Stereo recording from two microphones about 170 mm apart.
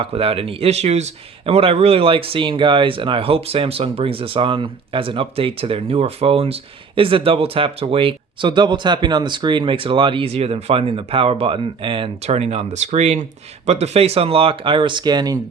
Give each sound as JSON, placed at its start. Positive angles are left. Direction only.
{"t": 0.0, "sound": "speech", "side_deg": -35}